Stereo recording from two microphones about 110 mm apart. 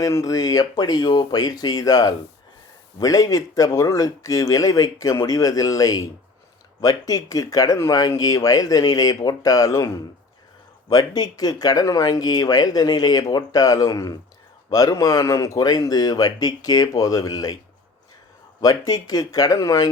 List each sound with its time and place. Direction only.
0.0 s speech: 30° left (ahead or behind)
18.6 s speech: 35° left (ahead or behind)